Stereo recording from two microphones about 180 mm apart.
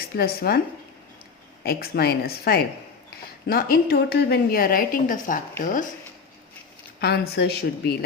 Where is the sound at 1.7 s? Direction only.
60° left (ahead or behind).